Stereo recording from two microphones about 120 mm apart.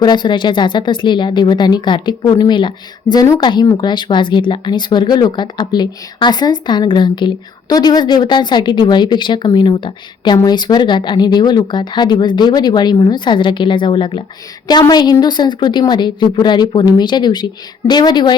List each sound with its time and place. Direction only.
0.0 s speech: 35° left (ahead or behind)